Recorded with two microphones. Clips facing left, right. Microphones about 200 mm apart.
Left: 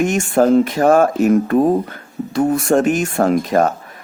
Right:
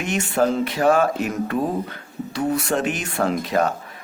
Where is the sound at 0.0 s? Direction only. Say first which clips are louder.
Left 6 dB; 45° left (ahead or behind).